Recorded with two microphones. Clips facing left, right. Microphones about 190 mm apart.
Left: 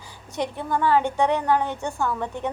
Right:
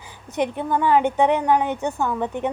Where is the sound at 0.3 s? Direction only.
15° right (ahead or behind).